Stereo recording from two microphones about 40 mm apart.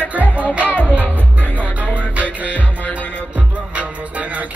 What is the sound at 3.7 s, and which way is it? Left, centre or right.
Music, right.